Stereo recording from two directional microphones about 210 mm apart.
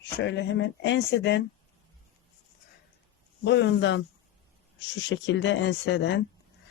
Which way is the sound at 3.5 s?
55° left (ahead or behind).